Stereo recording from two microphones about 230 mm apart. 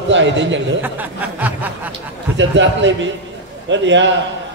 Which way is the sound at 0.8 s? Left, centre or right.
Centre.